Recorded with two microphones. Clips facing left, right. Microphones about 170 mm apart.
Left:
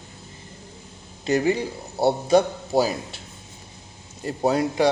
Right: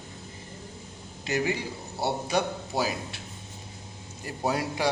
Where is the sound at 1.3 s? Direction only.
35° left (ahead or behind).